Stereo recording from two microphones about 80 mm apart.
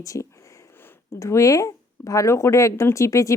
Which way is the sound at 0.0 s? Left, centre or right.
Left.